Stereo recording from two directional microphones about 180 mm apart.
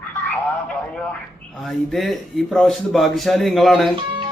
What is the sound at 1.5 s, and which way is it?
Speech, centre (ahead or behind).